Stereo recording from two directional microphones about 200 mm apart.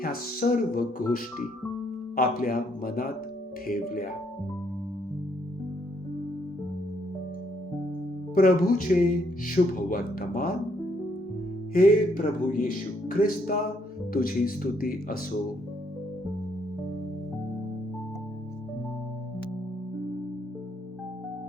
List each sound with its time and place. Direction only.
0.0 s speech: 45° left (ahead or behind)
8.4 s speech: 45° left (ahead or behind)
11.7 s speech: 45° left (ahead or behind)